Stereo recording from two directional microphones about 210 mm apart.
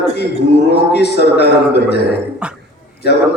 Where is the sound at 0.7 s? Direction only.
50° left (ahead or behind).